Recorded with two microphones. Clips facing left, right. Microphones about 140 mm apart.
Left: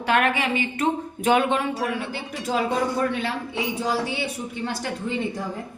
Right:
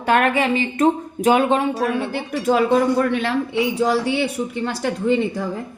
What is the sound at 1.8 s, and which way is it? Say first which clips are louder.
Speech: right 6 dB; 55° right (ahead or behind).